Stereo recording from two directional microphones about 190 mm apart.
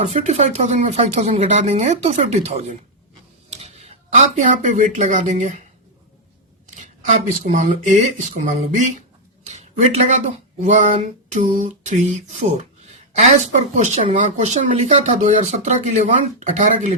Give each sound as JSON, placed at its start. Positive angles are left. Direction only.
{"t": 0.0, "sound": "speech", "side_deg": -35}
{"t": 7.4, "sound": "speech", "side_deg": -40}